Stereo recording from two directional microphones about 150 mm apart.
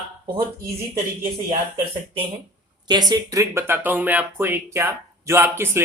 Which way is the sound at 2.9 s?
25° right (ahead or behind).